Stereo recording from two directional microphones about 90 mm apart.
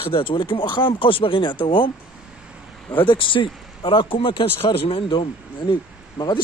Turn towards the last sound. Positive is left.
turn(degrees=55)  # may be behind; listen again after turning